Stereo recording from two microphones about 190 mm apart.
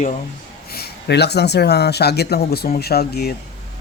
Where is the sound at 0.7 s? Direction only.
60° left (ahead or behind).